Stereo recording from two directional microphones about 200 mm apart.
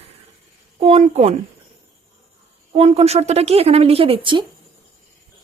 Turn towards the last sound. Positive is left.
turn(degrees=-25)  # may be behind; listen again after turning